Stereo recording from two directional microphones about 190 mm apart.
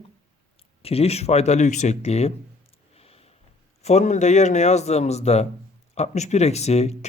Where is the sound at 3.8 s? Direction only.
35° left (ahead or behind).